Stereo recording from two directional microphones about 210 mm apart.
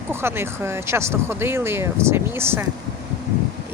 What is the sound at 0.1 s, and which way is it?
Speech, 10° right (ahead or behind).